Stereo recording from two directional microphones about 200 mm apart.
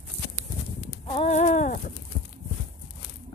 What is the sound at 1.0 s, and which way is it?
Clip-clop, 30° left (ahead or behind).